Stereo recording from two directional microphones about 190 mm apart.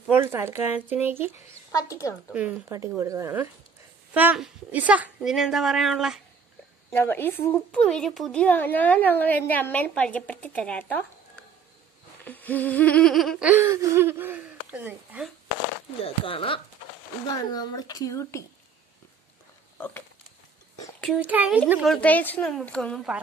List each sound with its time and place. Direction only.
0.1 s speech: 10° right (ahead or behind)
1.7 s a woman's voice: 15° left (ahead or behind)
2.2 s speech: 5° right (ahead or behind)
4.1 s humming: 10° right (ahead or behind)
6.9 s a woman's voice: 10° left (ahead or behind)
12.3 s humming: 10° left (ahead or behind); by 15.3 s 5° right (ahead or behind)
16.0 s a woman's voice: 30° left (ahead or behind)
21.2 s speech: 10° right (ahead or behind)
21.9 s humming: 10° left (ahead or behind)